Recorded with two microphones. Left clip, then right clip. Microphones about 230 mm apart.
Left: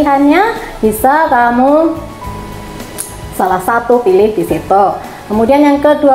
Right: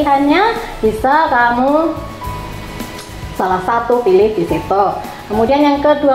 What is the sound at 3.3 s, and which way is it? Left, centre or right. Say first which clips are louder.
A woman's voice: left 3 dB; left.